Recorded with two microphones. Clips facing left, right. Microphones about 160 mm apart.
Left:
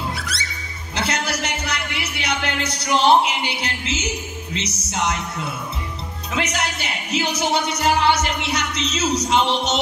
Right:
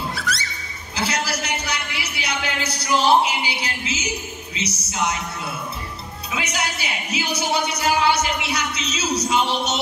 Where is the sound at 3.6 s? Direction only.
70° left (ahead or behind).